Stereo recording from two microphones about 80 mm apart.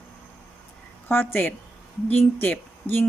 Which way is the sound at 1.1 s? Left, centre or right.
Left.